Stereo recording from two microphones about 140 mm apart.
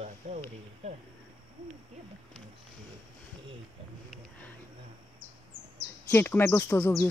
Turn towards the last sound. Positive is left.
turn(degrees=15)  # may be behind; listen again after turning